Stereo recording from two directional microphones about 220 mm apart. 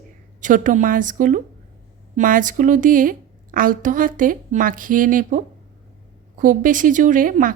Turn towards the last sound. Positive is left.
turn(degrees=-40)  # may be behind; listen again after turning